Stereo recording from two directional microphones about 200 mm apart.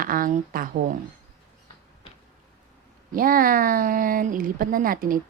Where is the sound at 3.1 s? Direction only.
45° right (ahead or behind).